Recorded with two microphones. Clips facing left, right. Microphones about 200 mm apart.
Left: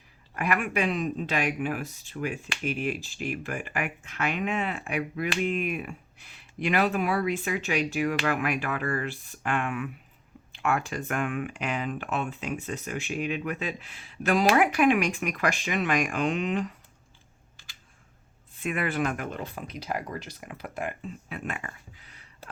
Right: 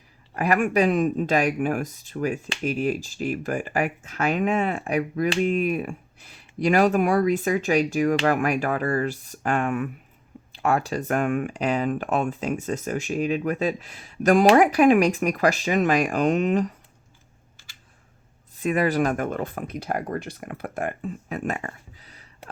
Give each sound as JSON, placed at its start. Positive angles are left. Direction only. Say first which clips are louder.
{"t": 0.3, "sound": "speech", "louder": "right 7 dB", "side_deg": -35}
{"t": 18.5, "sound": "speech", "louder": "right 7 dB", "side_deg": -35}